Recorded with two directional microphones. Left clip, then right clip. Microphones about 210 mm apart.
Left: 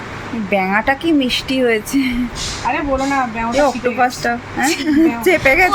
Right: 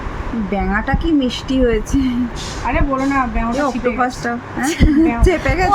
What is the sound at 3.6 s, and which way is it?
A woman's voice, 5° left (ahead or behind).